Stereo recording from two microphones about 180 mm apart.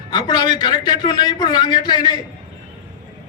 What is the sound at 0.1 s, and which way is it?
A man's voice, 25° left (ahead or behind).